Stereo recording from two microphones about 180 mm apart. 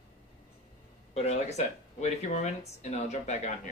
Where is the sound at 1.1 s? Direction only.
35° left (ahead or behind).